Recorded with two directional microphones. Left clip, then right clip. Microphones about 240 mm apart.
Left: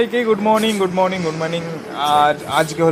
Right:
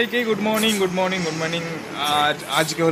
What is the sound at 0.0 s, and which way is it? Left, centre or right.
Speech, centre.